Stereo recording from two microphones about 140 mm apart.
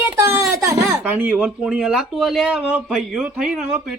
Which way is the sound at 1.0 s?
10° right (ahead or behind).